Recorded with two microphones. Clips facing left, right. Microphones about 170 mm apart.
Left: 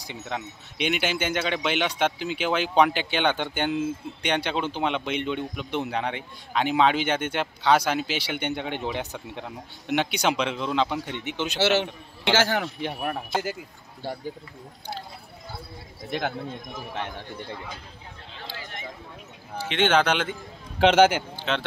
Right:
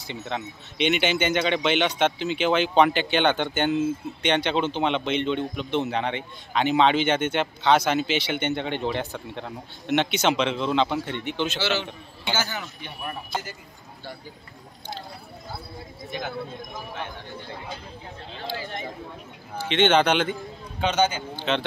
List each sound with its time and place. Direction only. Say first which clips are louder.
0.1 s speech: right 2 dB; 5° left (ahead or behind)
12.3 s speech: left 6 dB; 75° left (ahead or behind)
16.1 s speech: left 4 dB; 70° left (ahead or behind)
19.7 s speech: right 2 dB; 5° left (ahead or behind)
20.8 s speech: left 6 dB; 90° left
21.4 s speech: right 6 dB; centre (ahead or behind)